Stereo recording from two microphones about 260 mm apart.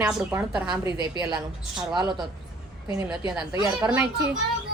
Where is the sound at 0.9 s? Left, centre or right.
Centre.